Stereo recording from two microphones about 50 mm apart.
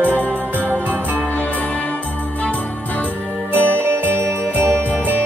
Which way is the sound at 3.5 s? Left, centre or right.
Right.